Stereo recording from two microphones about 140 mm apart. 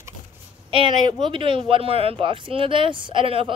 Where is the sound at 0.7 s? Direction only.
40° right (ahead or behind).